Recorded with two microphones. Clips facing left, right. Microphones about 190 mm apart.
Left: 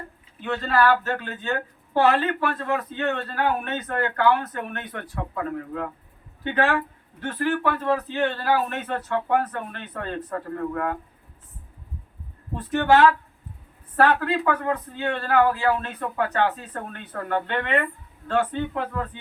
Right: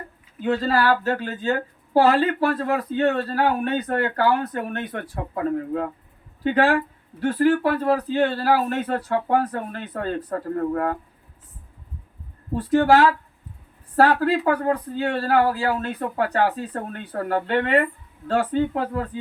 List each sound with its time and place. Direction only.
0.3 s speech: 35° right (ahead or behind)
12.5 s speech: 35° right (ahead or behind)